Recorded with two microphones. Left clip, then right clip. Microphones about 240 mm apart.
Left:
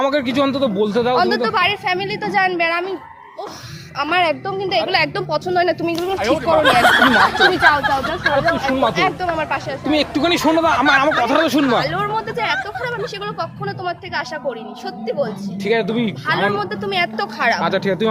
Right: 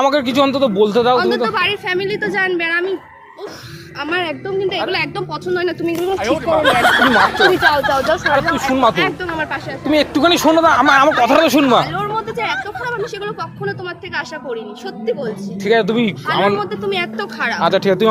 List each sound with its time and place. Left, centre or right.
0.0 s speech: centre
1.1 s speech: left
3.9 s speech: left
6.1 s speech: centre
9.3 s a sound: left
9.8 s speech: centre
11.2 s speech: centre
11.8 s chatter: left
13.2 s speech: left
15.6 s speech: centre
16.6 s speech: left
17.6 s speech: centre